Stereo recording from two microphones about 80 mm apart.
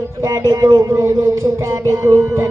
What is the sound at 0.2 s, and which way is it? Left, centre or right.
Music, right.